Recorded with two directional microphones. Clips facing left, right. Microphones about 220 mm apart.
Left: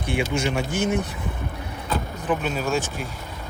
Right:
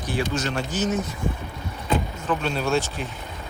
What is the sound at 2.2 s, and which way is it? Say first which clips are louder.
Speech: left 1 dB; 10° left (ahead or behind).